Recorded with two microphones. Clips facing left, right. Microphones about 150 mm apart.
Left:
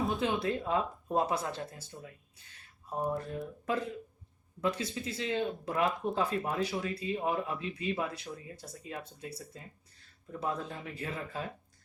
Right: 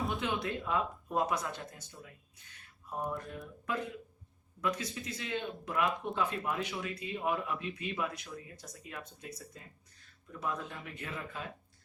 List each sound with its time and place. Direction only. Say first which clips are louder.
0.2 s speech: left 4 dB; 30° left (ahead or behind)